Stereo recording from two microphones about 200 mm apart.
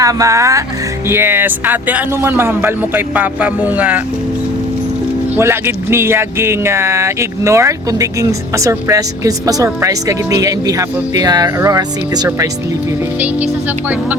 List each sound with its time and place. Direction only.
0.0 s speech: 15° right (ahead or behind)
5.4 s speech: 10° right (ahead or behind)
13.1 s speech: 10° right (ahead or behind)